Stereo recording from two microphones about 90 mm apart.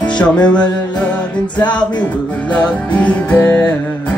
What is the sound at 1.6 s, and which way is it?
Speech, 55° left (ahead or behind).